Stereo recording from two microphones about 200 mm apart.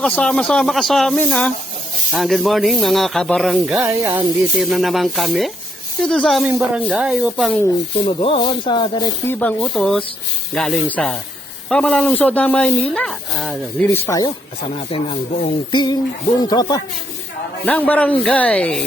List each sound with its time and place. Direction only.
0.0 s speech: 5° left (ahead or behind)
3.8 s speech: 10° right (ahead or behind)
8.0 s speech: 25° left (ahead or behind)
9.2 s speech: 10° left (ahead or behind)
13.9 s speech: 15° left (ahead or behind)
14.9 s speech: 25° left (ahead or behind)
17.7 s speech: 5° left (ahead or behind)